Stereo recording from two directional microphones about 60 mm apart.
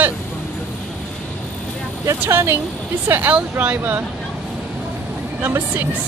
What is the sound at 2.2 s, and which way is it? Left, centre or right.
Speech, right.